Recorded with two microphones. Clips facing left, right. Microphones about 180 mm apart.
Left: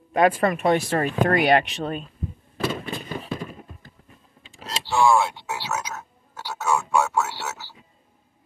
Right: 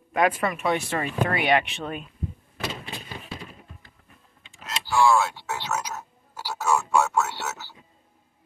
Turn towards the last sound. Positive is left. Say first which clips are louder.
# even
turn(degrees=5)  # may be behind; listen again after turning